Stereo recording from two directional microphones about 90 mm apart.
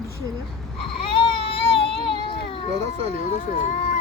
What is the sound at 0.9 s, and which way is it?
Baby cry, 80° left.